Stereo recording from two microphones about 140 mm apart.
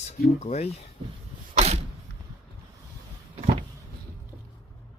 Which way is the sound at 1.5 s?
50° right (ahead or behind).